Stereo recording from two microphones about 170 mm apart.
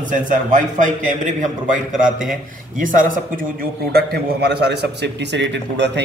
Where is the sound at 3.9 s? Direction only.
70° right (ahead or behind).